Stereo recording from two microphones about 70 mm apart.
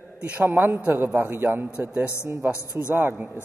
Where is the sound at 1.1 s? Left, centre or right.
Right.